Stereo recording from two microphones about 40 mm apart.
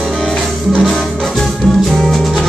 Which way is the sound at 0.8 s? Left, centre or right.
Centre.